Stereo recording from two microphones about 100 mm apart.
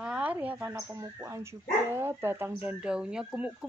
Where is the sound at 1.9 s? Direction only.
25° right (ahead or behind).